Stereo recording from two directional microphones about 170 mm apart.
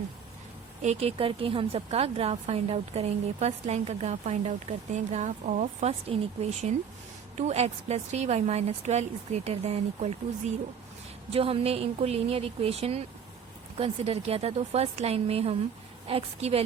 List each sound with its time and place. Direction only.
0.8 s speech: 40° right (ahead or behind)